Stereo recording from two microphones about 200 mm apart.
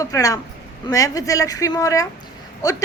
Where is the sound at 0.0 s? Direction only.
15° left (ahead or behind).